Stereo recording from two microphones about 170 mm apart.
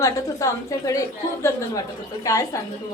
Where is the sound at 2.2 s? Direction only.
20° left (ahead or behind).